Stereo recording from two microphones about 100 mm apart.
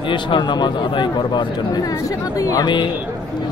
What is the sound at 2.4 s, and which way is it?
Speech, 35° left (ahead or behind).